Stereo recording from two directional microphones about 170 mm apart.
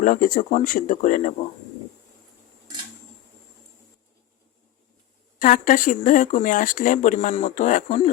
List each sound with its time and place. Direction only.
0.0 s speech: 50° left (ahead or behind)
5.4 s speech: 55° left (ahead or behind)